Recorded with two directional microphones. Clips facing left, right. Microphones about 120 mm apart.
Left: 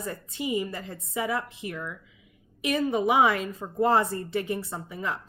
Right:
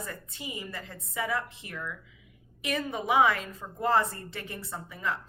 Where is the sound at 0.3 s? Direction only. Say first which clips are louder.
Left 13 dB; 20° left (ahead or behind).